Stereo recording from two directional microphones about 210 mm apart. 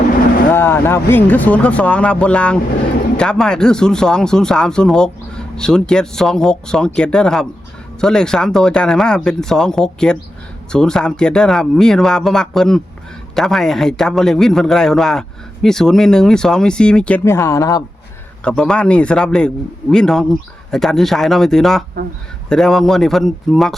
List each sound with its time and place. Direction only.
0.5 s speech: 10° left (ahead or behind)
18.4 s speech: 5° left (ahead or behind)